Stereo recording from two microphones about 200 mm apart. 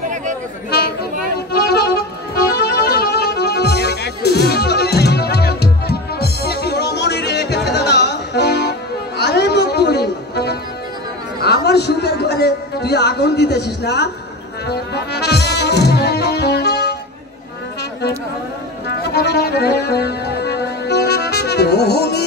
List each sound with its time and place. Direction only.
1.5 s music: 50° left (ahead or behind)
11.4 s a sound: 55° left (ahead or behind)
14.7 s music: 55° left (ahead or behind)
19.1 s music: 55° left (ahead or behind)